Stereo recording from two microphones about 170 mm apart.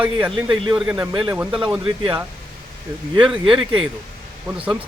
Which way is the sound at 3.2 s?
30° right (ahead or behind).